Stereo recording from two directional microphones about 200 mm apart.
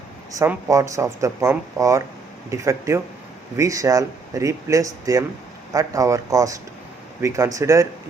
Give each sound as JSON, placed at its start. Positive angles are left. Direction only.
{"t": 0.3, "sound": "speech", "side_deg": -15}